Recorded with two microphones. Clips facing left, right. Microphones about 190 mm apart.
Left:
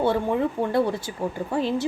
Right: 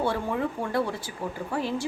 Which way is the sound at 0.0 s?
25° left (ahead or behind).